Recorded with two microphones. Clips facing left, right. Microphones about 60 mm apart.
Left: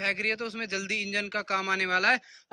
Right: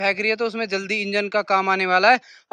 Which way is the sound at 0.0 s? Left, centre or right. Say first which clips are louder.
Right 9 dB; right.